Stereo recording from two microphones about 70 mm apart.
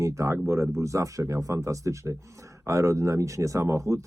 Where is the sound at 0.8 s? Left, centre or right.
Right.